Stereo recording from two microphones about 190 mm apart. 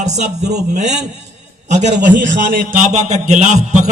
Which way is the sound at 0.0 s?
40° right (ahead or behind).